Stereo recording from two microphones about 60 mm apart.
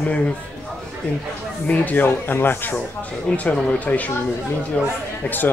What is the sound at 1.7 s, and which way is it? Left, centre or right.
Speech, left.